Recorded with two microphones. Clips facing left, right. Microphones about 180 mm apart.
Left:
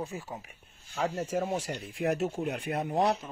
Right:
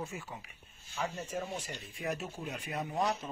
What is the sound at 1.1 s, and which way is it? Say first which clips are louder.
Speech: left 8 dB; 90° left.